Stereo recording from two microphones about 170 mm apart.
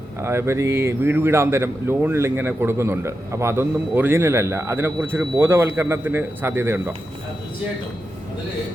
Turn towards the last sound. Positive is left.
turn(degrees=-10)  # may be behind; listen again after turning